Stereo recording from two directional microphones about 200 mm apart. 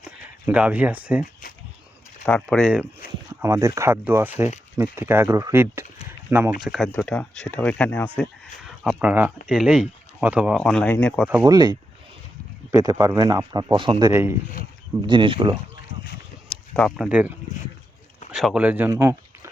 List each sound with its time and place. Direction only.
0.0 s speech: 5° right (ahead or behind)
1.2 s a sound: 45° left (ahead or behind)
2.2 s speech: 5° left (ahead or behind)
3.2 s a sound: 15° right (ahead or behind)
3.8 s speech: 15° right (ahead or behind); by 8.3 s 5° left (ahead or behind)
8.6 s speech: 5° right (ahead or behind)
10.6 s speech: 5° left (ahead or behind)
11.3 s speech: 10° right (ahead or behind)
11.5 s speech: 20° right (ahead or behind)
14.1 s speech: 10° right (ahead or behind)
15.0 s speech: 25° right (ahead or behind)
16.5 s a sound: 5° left (ahead or behind)
17.1 s speech: 5° right (ahead or behind)